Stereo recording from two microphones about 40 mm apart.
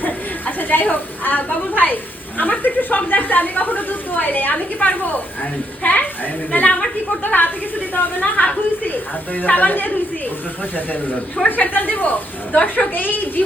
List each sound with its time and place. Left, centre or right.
0.0 s a sound: left
1.7 s a woman's voice: left
7.9 s a woman's voice: left
11.4 s a woman's voice: left